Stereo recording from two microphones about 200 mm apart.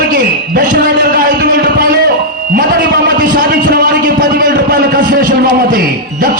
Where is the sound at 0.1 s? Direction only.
45° right (ahead or behind).